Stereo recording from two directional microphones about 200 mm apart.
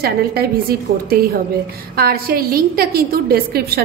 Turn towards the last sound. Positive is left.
turn(degrees=-50)  # may be behind; listen again after turning